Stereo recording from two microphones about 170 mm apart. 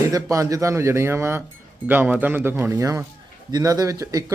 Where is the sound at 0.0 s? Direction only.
20° right (ahead or behind).